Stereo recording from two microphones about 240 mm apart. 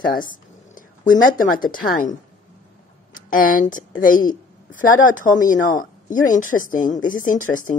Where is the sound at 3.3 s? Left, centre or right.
Left.